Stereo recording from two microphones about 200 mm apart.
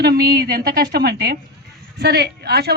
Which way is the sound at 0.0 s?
50° right (ahead or behind).